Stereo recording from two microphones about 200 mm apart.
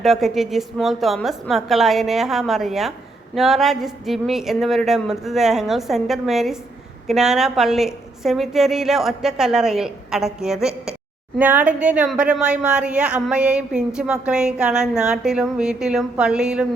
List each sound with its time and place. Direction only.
0.0 s a woman's voice: centre (ahead or behind)